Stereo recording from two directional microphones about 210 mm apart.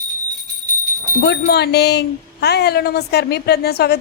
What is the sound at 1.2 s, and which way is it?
A woman's voice, 50° left (ahead or behind).